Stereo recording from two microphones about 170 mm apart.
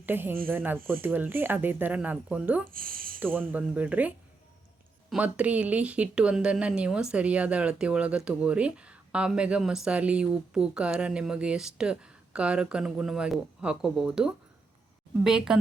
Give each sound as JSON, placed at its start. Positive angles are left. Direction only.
{"t": 0.0, "sound": "speech", "side_deg": -10}
{"t": 2.7, "sound": "speech", "side_deg": -55}
{"t": 3.2, "sound": "speech", "side_deg": -10}